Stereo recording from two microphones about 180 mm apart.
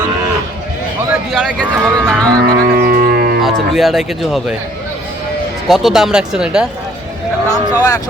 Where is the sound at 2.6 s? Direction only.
55° right (ahead or behind).